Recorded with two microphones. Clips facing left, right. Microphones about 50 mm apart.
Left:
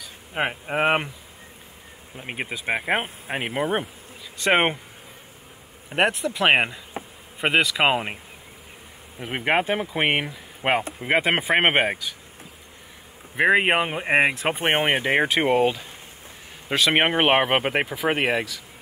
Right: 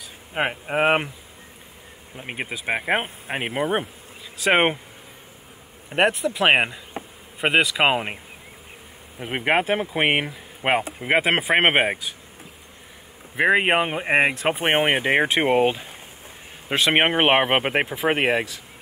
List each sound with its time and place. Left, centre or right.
0.3 s speech: centre
2.1 s speech: centre
5.9 s speech: centre
9.2 s speech: centre
13.4 s speech: centre
16.9 s speech: centre